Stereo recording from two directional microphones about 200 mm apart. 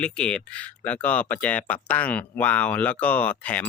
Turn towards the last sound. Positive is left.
turn(degrees=5)  # may be behind; listen again after turning